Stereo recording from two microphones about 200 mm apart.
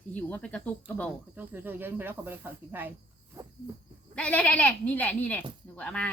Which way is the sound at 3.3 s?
15° right (ahead or behind).